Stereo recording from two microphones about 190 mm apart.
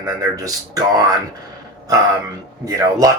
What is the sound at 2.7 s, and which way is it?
Speech, 20° right (ahead or behind).